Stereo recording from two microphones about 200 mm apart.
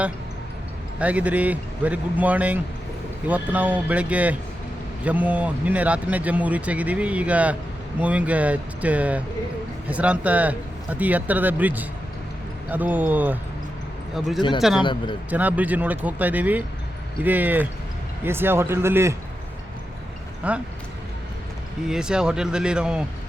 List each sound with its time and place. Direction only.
0.9 s speech: 5° right (ahead or behind)
14.8 s a man's voice: 25° left (ahead or behind)
15.3 s speech: 10° right (ahead or behind)
20.4 s speech: 5° right (ahead or behind)
21.8 s speech: 5° right (ahead or behind)